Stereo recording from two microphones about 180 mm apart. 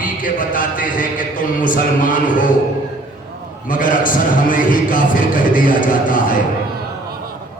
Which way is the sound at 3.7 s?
50° left (ahead or behind).